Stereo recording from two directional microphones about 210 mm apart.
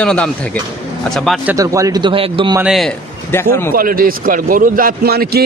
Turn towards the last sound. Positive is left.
turn(degrees=-50)  # may be behind; listen again after turning